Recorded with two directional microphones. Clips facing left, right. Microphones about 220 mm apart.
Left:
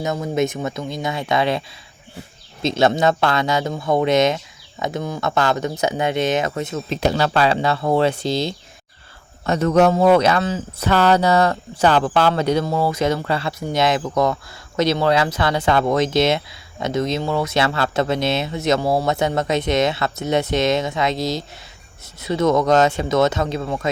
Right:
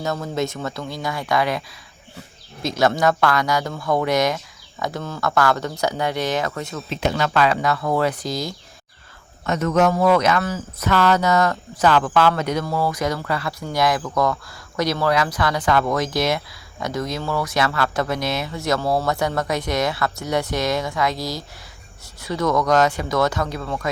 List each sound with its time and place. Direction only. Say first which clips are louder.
0.0 s speech: left 3 dB; 15° left (ahead or behind)
6.9 s speech: left 2 dB; 35° left (ahead or behind)